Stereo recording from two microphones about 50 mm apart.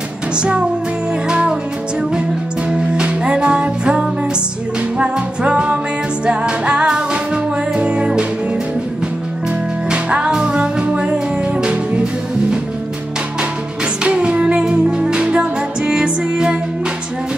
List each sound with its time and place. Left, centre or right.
0.4 s music: centre
2.7 s music: centre
9.8 s music: centre
14.0 s music: right